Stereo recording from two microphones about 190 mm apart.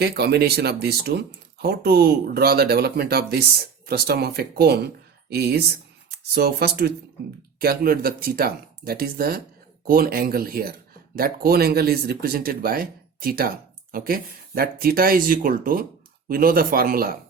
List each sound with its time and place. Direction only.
0.0 s speech: 60° right (ahead or behind)